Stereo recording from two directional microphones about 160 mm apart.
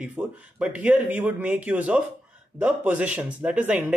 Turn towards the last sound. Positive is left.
turn(degrees=-10)  # may be behind; listen again after turning